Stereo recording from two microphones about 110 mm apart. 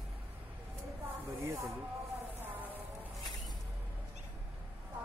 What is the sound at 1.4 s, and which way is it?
Speech, 25° right (ahead or behind).